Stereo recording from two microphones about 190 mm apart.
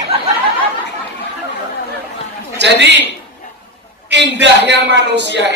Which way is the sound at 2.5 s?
65° right (ahead or behind).